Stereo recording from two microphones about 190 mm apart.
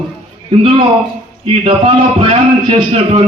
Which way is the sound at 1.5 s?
30° right (ahead or behind).